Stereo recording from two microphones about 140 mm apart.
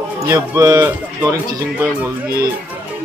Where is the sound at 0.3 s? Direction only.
20° right (ahead or behind).